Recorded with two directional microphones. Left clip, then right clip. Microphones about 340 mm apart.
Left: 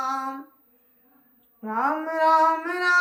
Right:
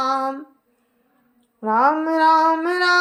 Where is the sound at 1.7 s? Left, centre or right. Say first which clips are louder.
Right 7 dB; centre.